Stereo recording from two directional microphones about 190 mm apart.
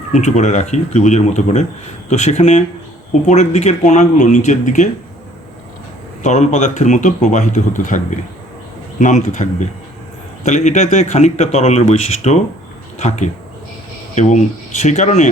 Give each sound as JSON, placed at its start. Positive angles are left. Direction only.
{"t": 0.1, "sound": "speech", "side_deg": 40}
{"t": 6.2, "sound": "speech", "side_deg": 35}